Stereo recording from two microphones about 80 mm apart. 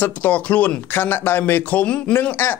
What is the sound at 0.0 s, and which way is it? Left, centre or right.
Speech, left.